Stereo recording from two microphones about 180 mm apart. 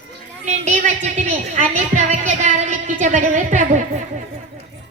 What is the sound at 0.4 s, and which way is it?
A woman's voice, 40° right (ahead or behind).